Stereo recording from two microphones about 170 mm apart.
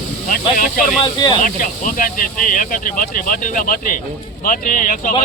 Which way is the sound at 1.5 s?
50° left (ahead or behind).